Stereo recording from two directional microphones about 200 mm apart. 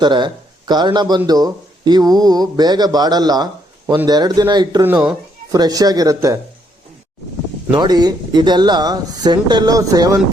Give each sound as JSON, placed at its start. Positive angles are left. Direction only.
{"t": 0.0, "sound": "speech", "side_deg": -20}
{"t": 4.9, "sound": "speech", "side_deg": -5}
{"t": 5.5, "sound": "speech", "side_deg": -20}
{"t": 7.7, "sound": "speech", "side_deg": -20}